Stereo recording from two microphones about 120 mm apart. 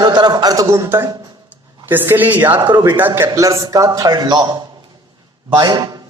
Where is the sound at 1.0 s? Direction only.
35° right (ahead or behind).